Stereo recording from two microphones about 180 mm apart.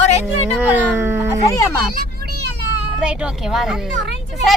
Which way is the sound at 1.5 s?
15° left (ahead or behind).